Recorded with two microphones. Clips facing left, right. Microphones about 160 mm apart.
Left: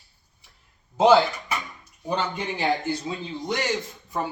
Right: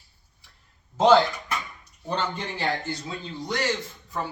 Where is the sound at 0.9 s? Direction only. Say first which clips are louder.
Left 1 dB; 10° left (ahead or behind).